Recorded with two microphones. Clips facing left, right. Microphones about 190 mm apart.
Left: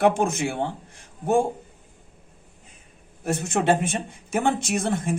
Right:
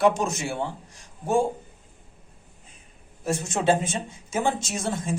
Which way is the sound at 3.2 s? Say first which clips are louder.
Left 1 dB; 60° left (ahead or behind).